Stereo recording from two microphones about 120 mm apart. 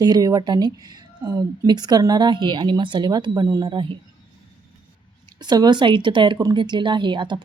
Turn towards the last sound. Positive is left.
turn(degrees=-40)  # may be behind; listen again after turning